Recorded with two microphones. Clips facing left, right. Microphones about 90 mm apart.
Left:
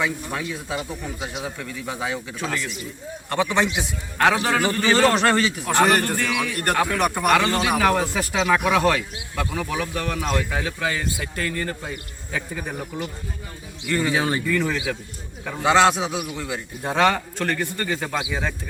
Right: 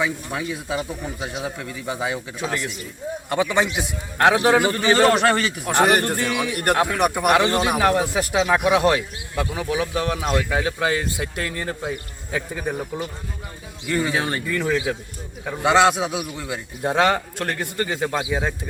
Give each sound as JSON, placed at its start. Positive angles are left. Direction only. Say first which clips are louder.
{"t": 0.0, "sound": "a man's voice", "louder": "right 1 dB", "side_deg": -5}
{"t": 13.8, "sound": "speech", "louder": "even", "side_deg": -15}
{"t": 14.1, "sound": "a man's voice", "louder": "left 1 dB", "side_deg": 5}
{"t": 14.4, "sound": "speech", "louder": "right 1 dB", "side_deg": -5}